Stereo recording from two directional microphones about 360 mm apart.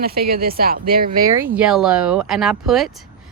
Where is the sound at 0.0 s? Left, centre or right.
Right.